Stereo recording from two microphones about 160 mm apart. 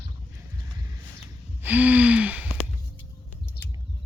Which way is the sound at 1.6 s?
10° right (ahead or behind).